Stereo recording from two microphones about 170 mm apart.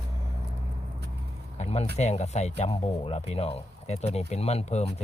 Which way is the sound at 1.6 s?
40° left (ahead or behind).